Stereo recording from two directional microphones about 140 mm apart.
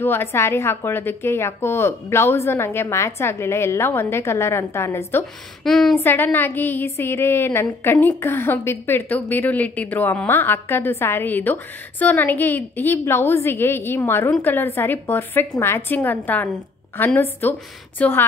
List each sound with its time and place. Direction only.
0.0 s speech: 15° left (ahead or behind)
5.6 s a woman's voice: centre (ahead or behind)
5.9 s speech: 15° left (ahead or behind)